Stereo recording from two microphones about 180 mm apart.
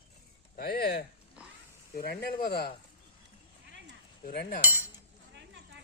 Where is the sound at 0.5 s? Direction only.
60° left (ahead or behind).